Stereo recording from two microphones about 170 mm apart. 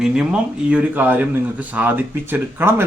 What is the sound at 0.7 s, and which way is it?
Speech, 10° right (ahead or behind).